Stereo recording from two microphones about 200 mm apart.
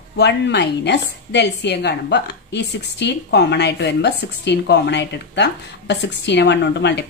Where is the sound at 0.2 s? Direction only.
60° left (ahead or behind).